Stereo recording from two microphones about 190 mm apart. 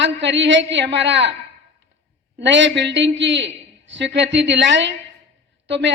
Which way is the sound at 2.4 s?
70° right (ahead or behind).